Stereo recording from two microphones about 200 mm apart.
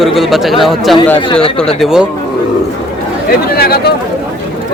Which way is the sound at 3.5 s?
50° left (ahead or behind).